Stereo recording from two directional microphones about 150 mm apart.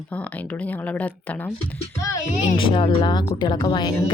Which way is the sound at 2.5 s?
35° left (ahead or behind).